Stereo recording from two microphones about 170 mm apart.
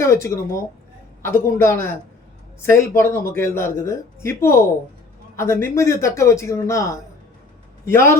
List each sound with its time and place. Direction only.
0.0 s speech: 15° left (ahead or behind)